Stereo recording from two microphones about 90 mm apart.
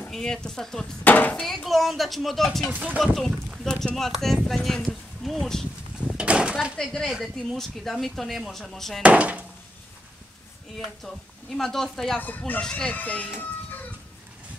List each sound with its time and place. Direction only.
0.1 s speech: 5° left (ahead or behind)
1.0 s speech: 20° left (ahead or behind)
1.3 s speech: 5° left (ahead or behind)
2.7 s speech: 15° right (ahead or behind)
3.0 s speech: centre (ahead or behind)
6.0 s a sound: 10° right (ahead or behind)
6.8 s speech: 5° left (ahead or behind)
9.0 s speech: 15° right (ahead or behind)
11.5 s speech: 5° left (ahead or behind)
12.2 s speech: 20° left (ahead or behind)